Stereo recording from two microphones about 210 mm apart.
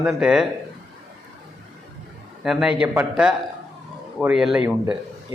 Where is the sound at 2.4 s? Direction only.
5° right (ahead or behind).